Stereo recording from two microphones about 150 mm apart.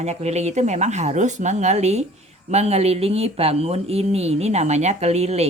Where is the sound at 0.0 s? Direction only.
45° right (ahead or behind).